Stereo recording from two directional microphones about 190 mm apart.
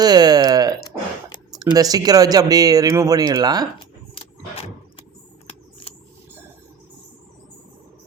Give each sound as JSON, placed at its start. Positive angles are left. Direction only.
{"t": 0.0, "sound": "a sound", "side_deg": -20}
{"t": 1.5, "sound": "speech", "side_deg": -20}
{"t": 3.8, "sound": "vehicle", "side_deg": 30}